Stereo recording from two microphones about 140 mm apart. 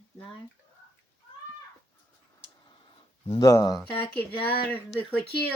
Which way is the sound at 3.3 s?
25° left (ahead or behind).